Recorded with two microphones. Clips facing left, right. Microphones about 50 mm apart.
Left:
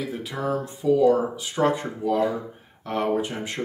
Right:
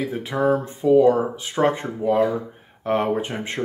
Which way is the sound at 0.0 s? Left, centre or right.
Right.